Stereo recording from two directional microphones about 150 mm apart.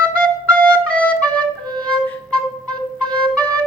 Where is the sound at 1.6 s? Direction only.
25° right (ahead or behind).